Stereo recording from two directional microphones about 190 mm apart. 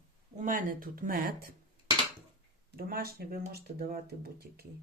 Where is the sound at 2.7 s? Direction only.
50° right (ahead or behind).